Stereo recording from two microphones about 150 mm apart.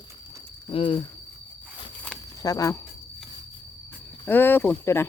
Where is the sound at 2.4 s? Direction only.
25° left (ahead or behind).